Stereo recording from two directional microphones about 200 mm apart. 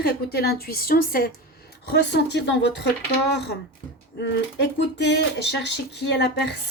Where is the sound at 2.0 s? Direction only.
60° left (ahead or behind).